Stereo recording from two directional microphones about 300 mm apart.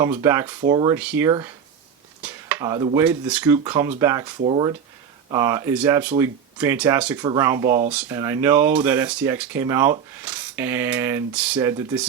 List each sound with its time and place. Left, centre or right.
0.0 s speech: centre